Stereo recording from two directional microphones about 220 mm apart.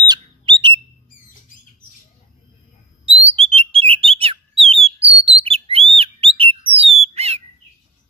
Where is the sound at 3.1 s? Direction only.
25° right (ahead or behind).